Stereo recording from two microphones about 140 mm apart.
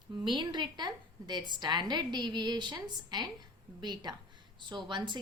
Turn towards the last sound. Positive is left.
turn(degrees=-35)  # may be behind; listen again after turning